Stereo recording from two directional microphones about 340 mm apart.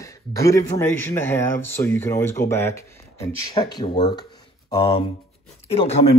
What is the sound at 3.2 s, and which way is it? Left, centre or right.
Speech, left.